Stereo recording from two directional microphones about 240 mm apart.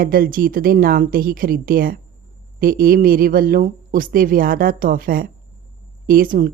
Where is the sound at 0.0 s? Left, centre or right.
Right.